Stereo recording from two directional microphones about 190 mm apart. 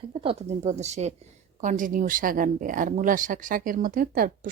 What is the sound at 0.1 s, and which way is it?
Speech, 30° right (ahead or behind).